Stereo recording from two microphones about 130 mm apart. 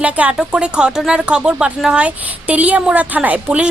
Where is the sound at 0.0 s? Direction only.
10° right (ahead or behind).